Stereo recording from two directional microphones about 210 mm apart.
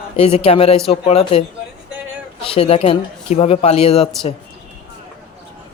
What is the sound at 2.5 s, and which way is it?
Speech, 30° left (ahead or behind).